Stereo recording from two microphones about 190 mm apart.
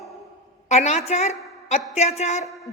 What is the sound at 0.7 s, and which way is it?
A woman's voice, 35° left (ahead or behind).